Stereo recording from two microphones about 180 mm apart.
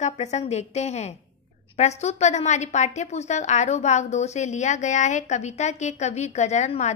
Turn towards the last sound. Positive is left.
turn(degrees=40)  # may be behind; listen again after turning